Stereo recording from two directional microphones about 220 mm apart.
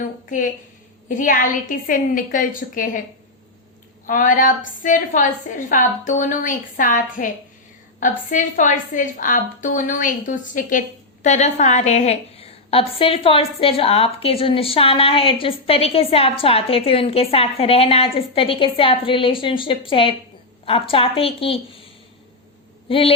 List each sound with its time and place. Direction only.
0.3 s a woman's voice: 35° left (ahead or behind)
4.0 s a woman's voice: 40° left (ahead or behind)
22.9 s a woman's voice: 25° left (ahead or behind)